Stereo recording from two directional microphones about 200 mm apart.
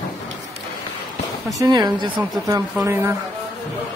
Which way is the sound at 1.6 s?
20° right (ahead or behind).